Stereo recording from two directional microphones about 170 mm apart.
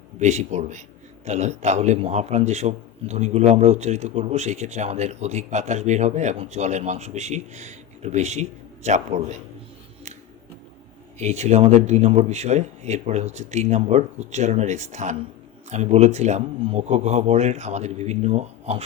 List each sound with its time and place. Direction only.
0.2 s a man's voice: 40° right (ahead or behind)
11.2 s a man's voice: 40° right (ahead or behind)